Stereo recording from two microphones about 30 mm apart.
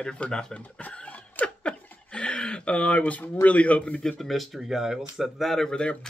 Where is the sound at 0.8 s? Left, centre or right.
Left.